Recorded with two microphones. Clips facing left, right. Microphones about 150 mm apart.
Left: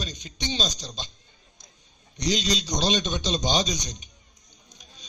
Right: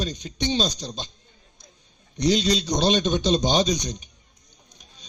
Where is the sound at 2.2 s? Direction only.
55° right (ahead or behind).